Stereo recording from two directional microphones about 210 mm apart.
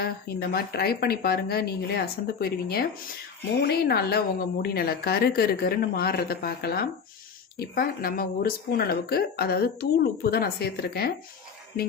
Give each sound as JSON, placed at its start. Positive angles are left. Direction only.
{"t": 0.0, "sound": "speech", "side_deg": 50}